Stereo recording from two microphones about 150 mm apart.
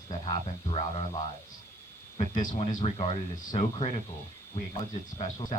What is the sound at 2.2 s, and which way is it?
Speech, 55° left (ahead or behind).